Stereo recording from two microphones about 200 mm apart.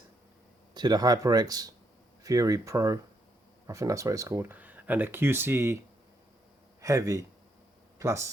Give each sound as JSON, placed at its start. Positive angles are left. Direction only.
{"t": 0.7, "sound": "speech", "side_deg": -20}
{"t": 6.8, "sound": "speech", "side_deg": -15}